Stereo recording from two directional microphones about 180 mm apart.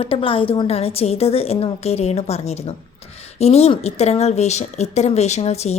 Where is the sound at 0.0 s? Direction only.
30° left (ahead or behind).